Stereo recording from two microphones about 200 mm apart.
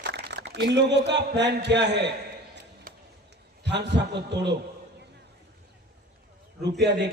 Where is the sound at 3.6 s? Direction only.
60° right (ahead or behind).